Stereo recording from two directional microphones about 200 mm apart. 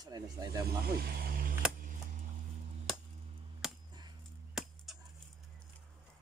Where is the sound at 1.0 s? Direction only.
50° right (ahead or behind).